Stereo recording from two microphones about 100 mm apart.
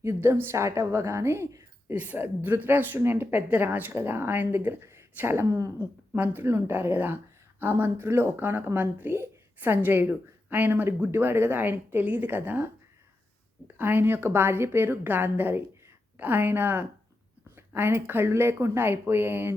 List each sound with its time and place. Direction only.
0.0 s a woman's voice: 25° right (ahead or behind)
6.1 s a woman's voice: 20° right (ahead or behind)
13.7 s a woman's voice: 20° right (ahead or behind)